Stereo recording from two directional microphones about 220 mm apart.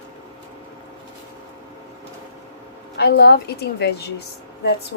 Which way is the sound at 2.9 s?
50° left (ahead or behind).